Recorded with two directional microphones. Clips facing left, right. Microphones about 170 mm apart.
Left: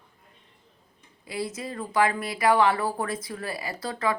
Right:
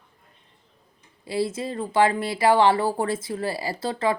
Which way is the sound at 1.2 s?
30° right (ahead or behind).